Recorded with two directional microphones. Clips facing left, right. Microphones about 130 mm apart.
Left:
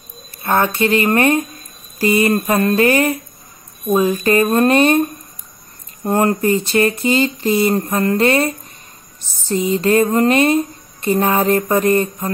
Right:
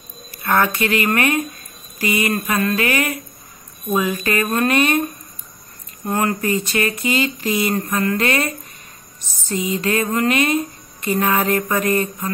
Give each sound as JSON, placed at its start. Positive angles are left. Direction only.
{"t": 0.4, "sound": "speech", "side_deg": 25}
{"t": 6.0, "sound": "speech", "side_deg": 30}